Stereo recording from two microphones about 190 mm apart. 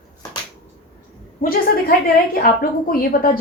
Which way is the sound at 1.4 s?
50° left (ahead or behind).